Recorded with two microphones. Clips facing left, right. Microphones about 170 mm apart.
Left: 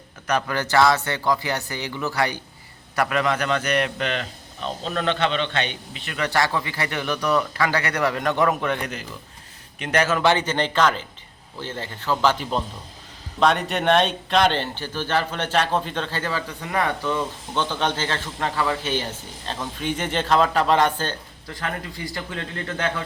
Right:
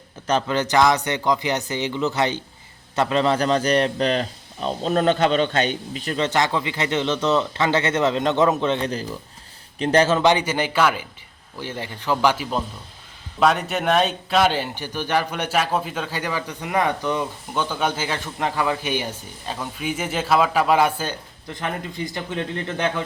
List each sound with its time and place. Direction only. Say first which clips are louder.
0.3 s a man's voice: right 2 dB; 25° right (ahead or behind); by 6.1 s 40° right (ahead or behind)
6.1 s a man's voice: right 1 dB; 20° right (ahead or behind)
10.2 s a man's voice: right 1 dB; 10° right (ahead or behind)
21.5 s speech: right 2 dB; 20° right (ahead or behind)